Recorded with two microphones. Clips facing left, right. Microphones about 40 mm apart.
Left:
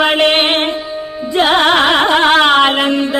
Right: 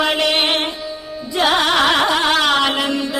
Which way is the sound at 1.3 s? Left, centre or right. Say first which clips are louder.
Left 5 dB; left.